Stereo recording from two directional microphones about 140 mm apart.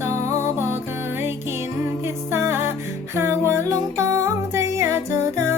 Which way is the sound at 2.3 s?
20° right (ahead or behind).